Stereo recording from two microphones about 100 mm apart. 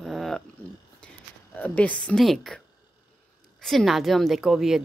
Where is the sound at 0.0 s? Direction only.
Centre (ahead or behind).